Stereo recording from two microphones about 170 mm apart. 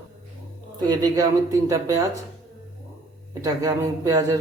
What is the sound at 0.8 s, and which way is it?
Speech, 20° right (ahead or behind).